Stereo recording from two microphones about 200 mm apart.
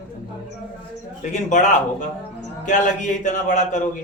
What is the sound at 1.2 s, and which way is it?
A man's voice, 40° left (ahead or behind).